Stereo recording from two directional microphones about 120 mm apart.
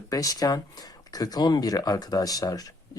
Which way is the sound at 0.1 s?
30° left (ahead or behind).